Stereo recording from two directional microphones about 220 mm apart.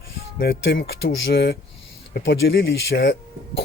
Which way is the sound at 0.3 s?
50° left (ahead or behind).